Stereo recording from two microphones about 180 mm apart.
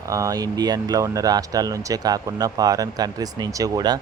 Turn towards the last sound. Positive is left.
turn(degrees=-20)  # may be behind; listen again after turning